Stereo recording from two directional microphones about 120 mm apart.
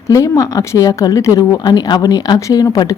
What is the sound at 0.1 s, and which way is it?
Speech, 25° left (ahead or behind).